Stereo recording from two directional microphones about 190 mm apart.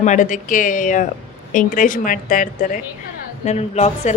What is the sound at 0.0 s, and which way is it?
A woman's voice, 40° left (ahead or behind).